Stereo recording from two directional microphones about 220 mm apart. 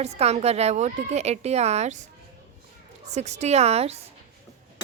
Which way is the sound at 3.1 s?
30° right (ahead or behind).